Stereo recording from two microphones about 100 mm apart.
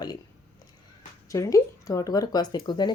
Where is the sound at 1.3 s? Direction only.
30° left (ahead or behind); by 2.9 s 50° left (ahead or behind).